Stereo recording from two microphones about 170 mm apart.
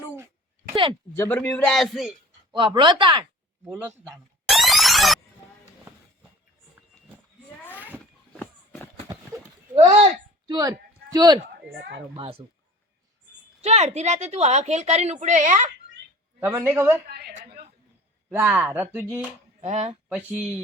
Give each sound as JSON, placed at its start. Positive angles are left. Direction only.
{"t": 0.7, "sound": "speech", "side_deg": -30}
{"t": 1.1, "sound": "a man's voice", "side_deg": 10}
{"t": 2.5, "sound": "speech", "side_deg": -30}
{"t": 3.7, "sound": "speech", "side_deg": -10}
{"t": 4.4, "sound": "music", "side_deg": 0}
{"t": 8.3, "sound": "walk", "side_deg": 5}
{"t": 9.3, "sound": "a sound", "side_deg": -15}
{"t": 10.5, "sound": "a man's voice", "side_deg": -20}
{"t": 13.6, "sound": "speech", "side_deg": -40}
{"t": 16.4, "sound": "speech", "side_deg": -15}
{"t": 17.1, "sound": "a sound", "side_deg": -70}
{"t": 18.3, "sound": "speech", "side_deg": -10}
{"t": 19.6, "sound": "speech", "side_deg": -45}
{"t": 20.1, "sound": "speech", "side_deg": -10}